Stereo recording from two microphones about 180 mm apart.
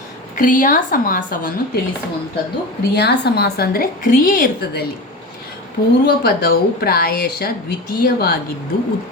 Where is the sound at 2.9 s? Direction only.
65° left (ahead or behind); by 4.8 s 50° left (ahead or behind).